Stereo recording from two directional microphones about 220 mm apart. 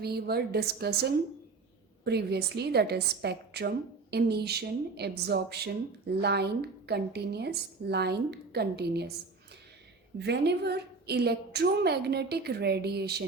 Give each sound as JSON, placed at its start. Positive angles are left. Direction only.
{"t": 0.0, "sound": "a woman's voice", "side_deg": -45}
{"t": 10.2, "sound": "a woman's voice", "side_deg": -50}